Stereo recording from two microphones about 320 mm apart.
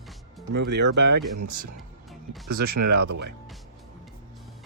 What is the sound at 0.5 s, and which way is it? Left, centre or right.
Speech, right.